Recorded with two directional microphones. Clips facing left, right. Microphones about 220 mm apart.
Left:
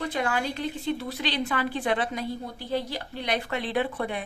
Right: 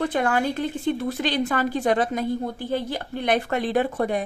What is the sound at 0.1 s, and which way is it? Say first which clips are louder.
Speech: right 5 dB; 50° right (ahead or behind).